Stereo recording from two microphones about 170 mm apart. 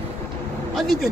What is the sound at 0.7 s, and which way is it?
Speech, centre (ahead or behind).